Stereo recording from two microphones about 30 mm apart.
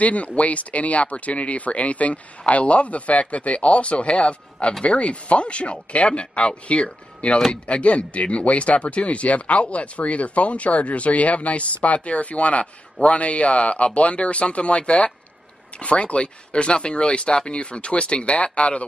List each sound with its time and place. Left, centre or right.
0.0 s speech: left